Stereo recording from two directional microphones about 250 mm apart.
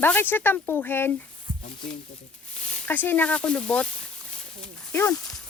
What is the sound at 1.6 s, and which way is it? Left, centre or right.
Speech, centre.